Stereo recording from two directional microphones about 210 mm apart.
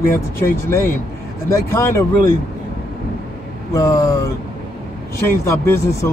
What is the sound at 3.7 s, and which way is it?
Speech, 15° left (ahead or behind).